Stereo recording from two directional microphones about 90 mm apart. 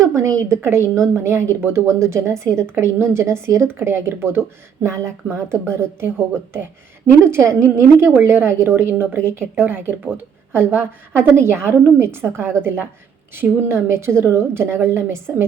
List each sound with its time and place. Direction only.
0.0 s a woman's voice: 40° right (ahead or behind)